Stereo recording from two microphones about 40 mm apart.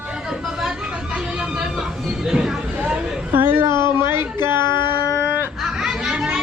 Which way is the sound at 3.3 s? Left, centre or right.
Right.